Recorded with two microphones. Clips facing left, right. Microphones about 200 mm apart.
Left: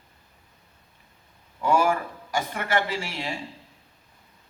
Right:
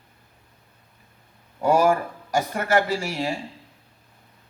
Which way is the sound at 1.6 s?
40° right (ahead or behind).